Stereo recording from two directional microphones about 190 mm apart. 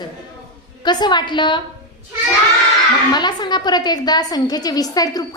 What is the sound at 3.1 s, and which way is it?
A woman's voice, 25° left (ahead or behind).